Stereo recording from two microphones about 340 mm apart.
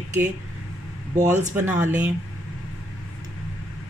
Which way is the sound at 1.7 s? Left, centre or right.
Centre.